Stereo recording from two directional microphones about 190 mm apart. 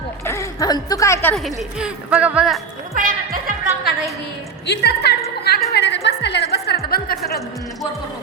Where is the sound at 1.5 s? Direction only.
5° right (ahead or behind).